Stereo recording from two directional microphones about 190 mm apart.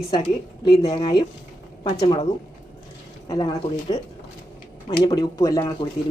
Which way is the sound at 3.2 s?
20° left (ahead or behind).